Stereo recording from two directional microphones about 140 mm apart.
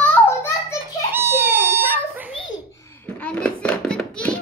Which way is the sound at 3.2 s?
10° left (ahead or behind).